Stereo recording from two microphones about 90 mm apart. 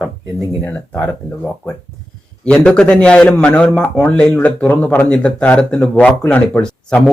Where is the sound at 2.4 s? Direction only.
10° left (ahead or behind).